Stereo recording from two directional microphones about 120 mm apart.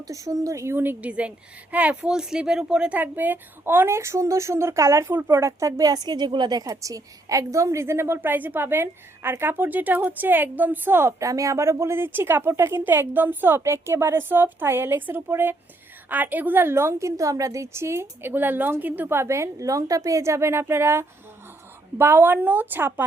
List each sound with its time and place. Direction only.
0.1 s speech: 25° right (ahead or behind)